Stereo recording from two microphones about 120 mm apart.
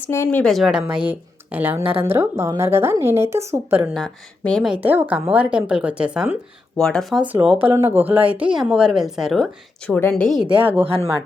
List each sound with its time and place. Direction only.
0.1 s speech: 20° left (ahead or behind)
0.5 s a woman's voice: 5° right (ahead or behind)
3.9 s speech: 5° left (ahead or behind)
4.7 s a woman's voice: 15° right (ahead or behind)
6.7 s speech: 5° left (ahead or behind)
7.2 s a woman's voice: 15° right (ahead or behind)
8.5 s speech: 5° right (ahead or behind)
9.9 s speech: 15° left (ahead or behind)
10.6 s a woman's voice: 15° right (ahead or behind)